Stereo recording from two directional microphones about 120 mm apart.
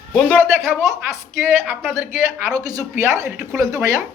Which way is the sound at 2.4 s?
30° right (ahead or behind).